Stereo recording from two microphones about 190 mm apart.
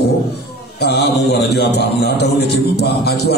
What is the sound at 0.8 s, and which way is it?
Mantra, 60° left (ahead or behind).